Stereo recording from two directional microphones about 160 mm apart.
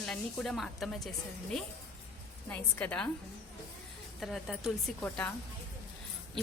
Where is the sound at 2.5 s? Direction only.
10° left (ahead or behind).